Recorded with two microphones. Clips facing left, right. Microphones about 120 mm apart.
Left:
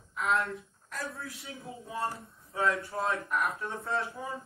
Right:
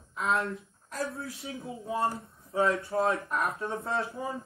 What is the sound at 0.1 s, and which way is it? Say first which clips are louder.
A woman's voice: right 1 dB; 25° right (ahead or behind).